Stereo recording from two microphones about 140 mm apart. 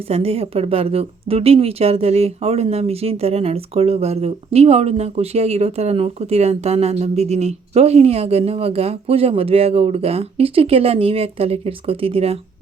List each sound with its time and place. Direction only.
0.1 s a woman's voice: 45° right (ahead or behind)